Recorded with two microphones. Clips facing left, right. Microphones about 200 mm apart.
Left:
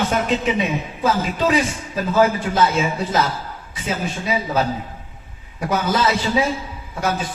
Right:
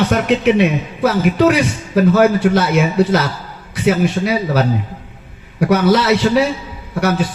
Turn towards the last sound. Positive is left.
turn(degrees=-75)  # may be behind; listen again after turning